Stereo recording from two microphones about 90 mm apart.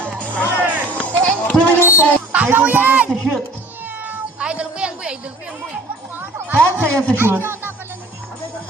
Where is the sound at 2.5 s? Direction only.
20° right (ahead or behind).